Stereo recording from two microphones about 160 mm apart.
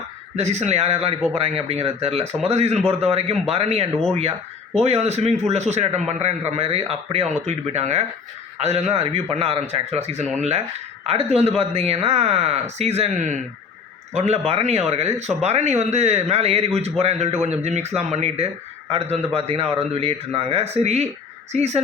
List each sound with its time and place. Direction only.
0.3 s a man's voice: 45° right (ahead or behind)